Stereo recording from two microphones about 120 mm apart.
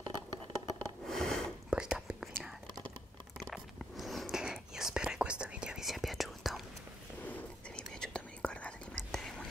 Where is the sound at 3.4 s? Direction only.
Centre (ahead or behind).